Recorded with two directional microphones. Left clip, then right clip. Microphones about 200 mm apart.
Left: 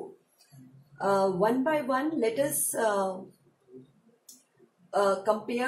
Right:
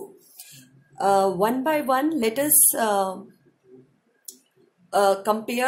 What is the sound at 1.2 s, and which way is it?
A woman's voice, 65° right (ahead or behind).